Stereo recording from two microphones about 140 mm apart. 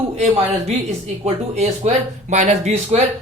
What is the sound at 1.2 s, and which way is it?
Speech, 50° right (ahead or behind).